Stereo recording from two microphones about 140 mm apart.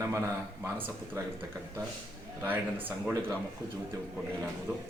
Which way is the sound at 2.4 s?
15° right (ahead or behind).